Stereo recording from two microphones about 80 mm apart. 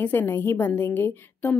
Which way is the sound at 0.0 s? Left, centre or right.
Left.